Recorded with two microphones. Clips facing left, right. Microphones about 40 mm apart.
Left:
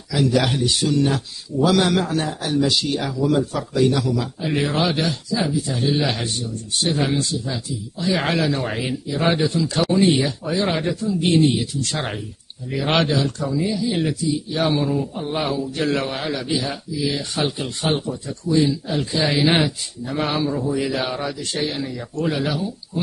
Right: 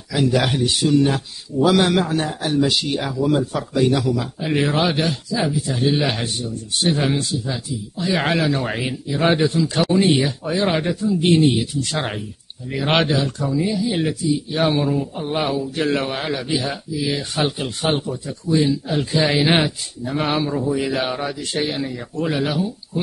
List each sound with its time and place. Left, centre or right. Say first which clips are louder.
0.3 s a man's voice: right 1 dB; centre
0.8 s a man's voice: right 5 dB; centre